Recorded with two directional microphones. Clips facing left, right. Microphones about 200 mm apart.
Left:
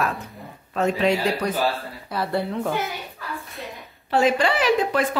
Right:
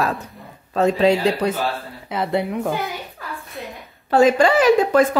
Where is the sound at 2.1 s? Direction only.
20° right (ahead or behind).